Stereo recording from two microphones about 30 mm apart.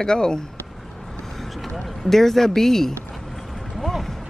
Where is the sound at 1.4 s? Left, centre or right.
Centre.